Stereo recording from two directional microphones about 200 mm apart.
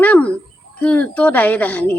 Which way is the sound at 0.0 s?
5° left (ahead or behind).